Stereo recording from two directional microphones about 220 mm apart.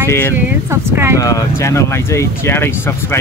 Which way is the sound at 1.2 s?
15° left (ahead or behind).